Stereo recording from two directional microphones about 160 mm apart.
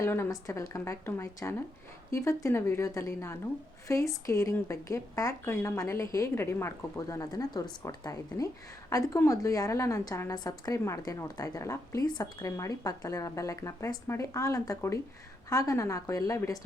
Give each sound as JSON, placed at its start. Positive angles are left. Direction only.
{"t": 0.0, "sound": "a woman's voice", "side_deg": 15}